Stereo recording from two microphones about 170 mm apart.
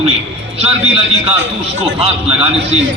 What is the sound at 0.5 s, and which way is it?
Speech, 35° right (ahead or behind).